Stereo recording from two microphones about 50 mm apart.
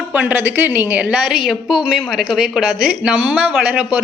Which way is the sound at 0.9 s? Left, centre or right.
Right.